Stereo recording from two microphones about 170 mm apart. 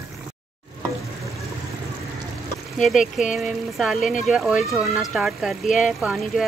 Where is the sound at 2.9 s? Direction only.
50° left (ahead or behind).